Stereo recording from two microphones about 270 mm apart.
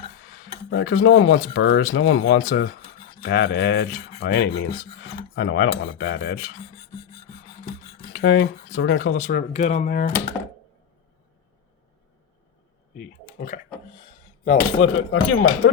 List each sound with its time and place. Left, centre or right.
0.3 s cutlery: left
1.5 s speech: left
8.2 s speech: left
13.0 s a sound: left
14.4 s speech: left